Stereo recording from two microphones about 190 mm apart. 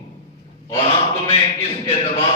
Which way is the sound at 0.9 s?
30° left (ahead or behind).